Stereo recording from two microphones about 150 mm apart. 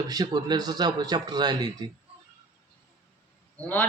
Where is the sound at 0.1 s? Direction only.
25° right (ahead or behind).